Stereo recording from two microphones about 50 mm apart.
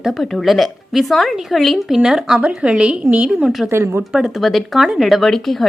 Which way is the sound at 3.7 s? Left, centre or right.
Right.